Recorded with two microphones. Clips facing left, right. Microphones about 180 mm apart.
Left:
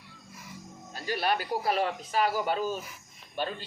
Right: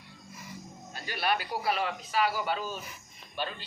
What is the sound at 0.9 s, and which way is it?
A man's voice, 40° left (ahead or behind).